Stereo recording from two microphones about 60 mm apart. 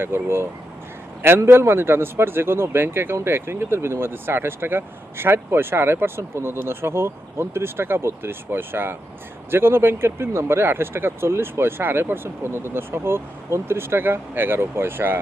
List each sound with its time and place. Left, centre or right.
0.0 s speech: right